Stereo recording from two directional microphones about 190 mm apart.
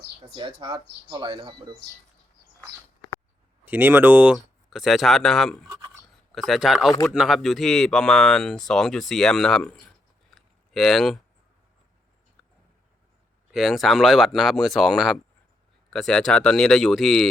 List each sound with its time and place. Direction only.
0.6 s speech: 25° right (ahead or behind)
3.7 s speech: 10° right (ahead or behind)
5.6 s writing: 20° right (ahead or behind)
6.3 s speech: centre (ahead or behind)
10.2 s a sound: centre (ahead or behind)
13.5 s speech: centre (ahead or behind)